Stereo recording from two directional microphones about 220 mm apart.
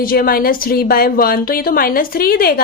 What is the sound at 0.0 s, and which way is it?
Speech, 40° left (ahead or behind).